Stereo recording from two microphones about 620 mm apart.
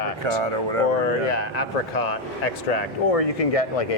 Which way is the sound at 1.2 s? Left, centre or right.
Left.